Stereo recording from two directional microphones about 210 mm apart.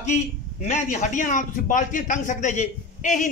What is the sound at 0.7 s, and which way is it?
A man's voice, 35° left (ahead or behind).